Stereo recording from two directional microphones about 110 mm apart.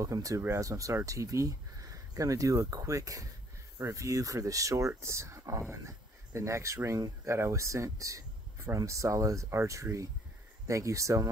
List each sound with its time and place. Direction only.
0.0 s speech: 30° right (ahead or behind)